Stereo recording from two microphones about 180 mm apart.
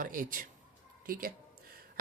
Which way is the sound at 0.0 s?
50° right (ahead or behind).